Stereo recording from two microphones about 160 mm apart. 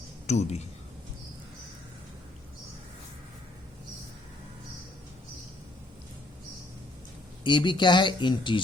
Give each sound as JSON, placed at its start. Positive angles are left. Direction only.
{"t": 0.3, "sound": "speech", "side_deg": 45}
{"t": 7.4, "sound": "speech", "side_deg": 30}